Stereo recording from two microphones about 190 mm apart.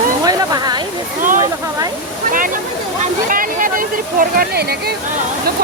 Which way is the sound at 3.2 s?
45° right (ahead or behind).